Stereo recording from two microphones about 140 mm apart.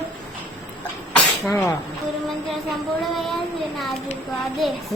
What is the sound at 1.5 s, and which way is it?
Speech, 20° left (ahead or behind).